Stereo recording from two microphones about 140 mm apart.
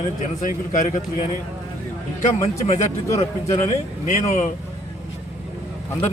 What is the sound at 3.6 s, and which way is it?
Speech, 55° left (ahead or behind).